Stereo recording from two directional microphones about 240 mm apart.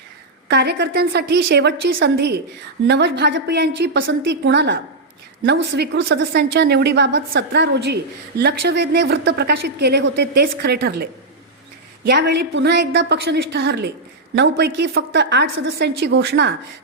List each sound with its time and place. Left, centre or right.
0.4 s a woman's voice: right